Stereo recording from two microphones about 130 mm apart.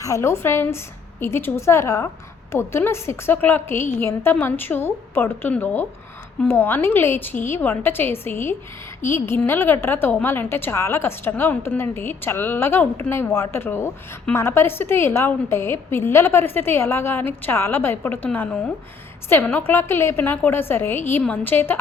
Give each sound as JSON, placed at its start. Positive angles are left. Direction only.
{"t": 0.0, "sound": "a woman's voice", "side_deg": 20}